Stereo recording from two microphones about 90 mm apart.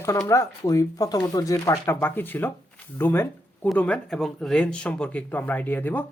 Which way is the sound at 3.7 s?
15° left (ahead or behind).